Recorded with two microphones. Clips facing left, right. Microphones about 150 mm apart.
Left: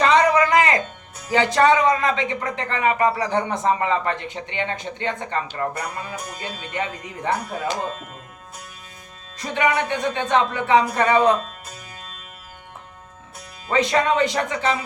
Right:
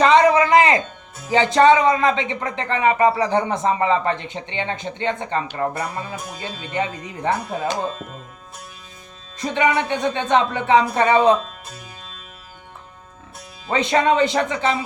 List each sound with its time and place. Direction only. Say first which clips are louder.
0.0 s a sound: right 3 dB; 25° right (ahead or behind)
1.3 s speech: right 3 dB; 20° right (ahead or behind)
9.4 s speech: right 2 dB; 30° right (ahead or behind)
13.7 s speech: right 2 dB; 25° right (ahead or behind)